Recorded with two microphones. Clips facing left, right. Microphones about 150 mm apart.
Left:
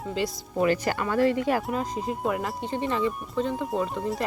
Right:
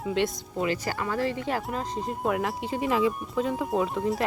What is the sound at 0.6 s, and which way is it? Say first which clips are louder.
Speech: left 4 dB; 20° right (ahead or behind).